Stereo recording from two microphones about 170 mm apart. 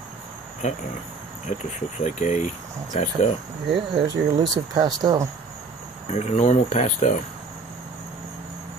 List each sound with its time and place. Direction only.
0.6 s speech: 45° left (ahead or behind)
2.0 s speech: 45° left (ahead or behind)
3.9 s speech: 25° right (ahead or behind)
6.0 s speech: 40° left (ahead or behind)